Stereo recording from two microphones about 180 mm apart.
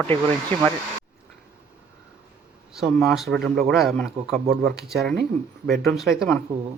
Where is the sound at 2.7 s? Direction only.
Centre (ahead or behind).